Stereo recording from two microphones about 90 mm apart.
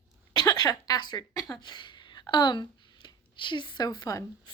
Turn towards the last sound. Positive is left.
turn(degrees=45)  # may be behind; listen again after turning